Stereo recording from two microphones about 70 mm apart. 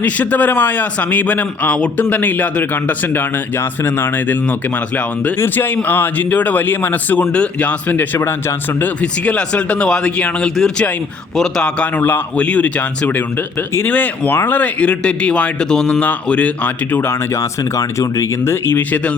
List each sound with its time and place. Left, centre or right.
0.0 s a man's voice: left
9.0 s a man's voice: centre
17.1 s speech: left
18.8 s a man's voice: left